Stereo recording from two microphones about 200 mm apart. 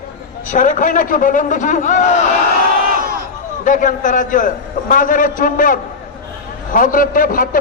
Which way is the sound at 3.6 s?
40° left (ahead or behind).